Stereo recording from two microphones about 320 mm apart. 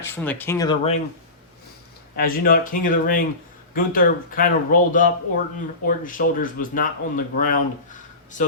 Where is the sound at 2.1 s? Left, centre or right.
Left.